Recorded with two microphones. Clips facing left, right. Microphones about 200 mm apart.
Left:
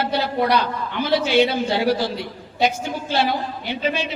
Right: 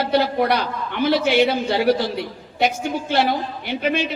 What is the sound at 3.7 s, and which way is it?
Speech, 60° right (ahead or behind).